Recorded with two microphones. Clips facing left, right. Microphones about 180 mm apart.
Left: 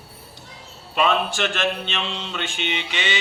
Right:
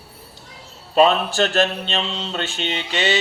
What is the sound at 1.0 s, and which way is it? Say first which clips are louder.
Speech: right 5 dB; 35° right (ahead or behind).